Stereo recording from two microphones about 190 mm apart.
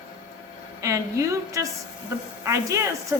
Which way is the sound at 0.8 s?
15° right (ahead or behind).